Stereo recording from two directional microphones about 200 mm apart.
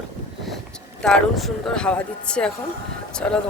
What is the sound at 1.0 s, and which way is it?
Speech, centre (ahead or behind).